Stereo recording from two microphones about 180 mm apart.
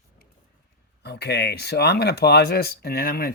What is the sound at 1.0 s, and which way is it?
Speech, 65° left (ahead or behind).